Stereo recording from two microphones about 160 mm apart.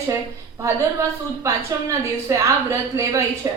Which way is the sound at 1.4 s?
20° right (ahead or behind).